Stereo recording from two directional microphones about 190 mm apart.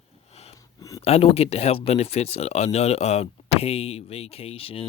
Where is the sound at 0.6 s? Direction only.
20° left (ahead or behind).